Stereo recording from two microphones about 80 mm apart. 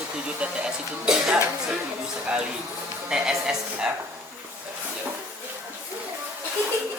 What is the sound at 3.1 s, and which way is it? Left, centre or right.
Speech, centre.